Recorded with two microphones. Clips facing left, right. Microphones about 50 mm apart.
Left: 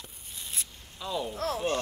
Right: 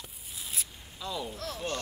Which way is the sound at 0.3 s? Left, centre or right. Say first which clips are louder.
Even; centre.